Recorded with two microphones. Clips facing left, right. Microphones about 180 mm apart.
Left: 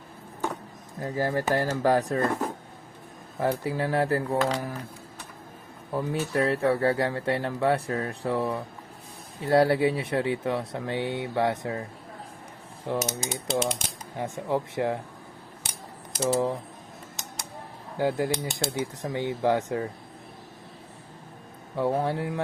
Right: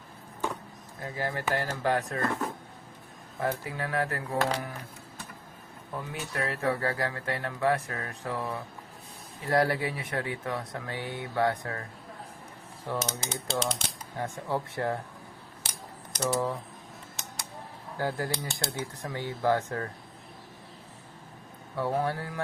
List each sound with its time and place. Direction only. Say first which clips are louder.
1.0 s speech: left 6 dB; 35° left (ahead or behind)
3.6 s speech: left 6 dB; 30° left (ahead or behind)
5.9 s speech: left 9 dB; 30° left (ahead or behind)
12.9 s mechanisms: left 4 dB; 10° left (ahead or behind)
16.2 s speech: left 4 dB; 25° left (ahead or behind)
17.9 s speech: left 6 dB; 20° left (ahead or behind)
21.8 s speech: left 3 dB; 20° left (ahead or behind)